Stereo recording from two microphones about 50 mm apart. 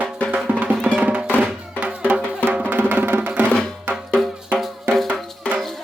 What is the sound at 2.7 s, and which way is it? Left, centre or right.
Music, right.